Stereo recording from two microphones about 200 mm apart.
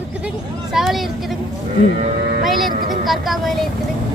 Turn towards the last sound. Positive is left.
turn(degrees=0)  # may be behind; listen again after turning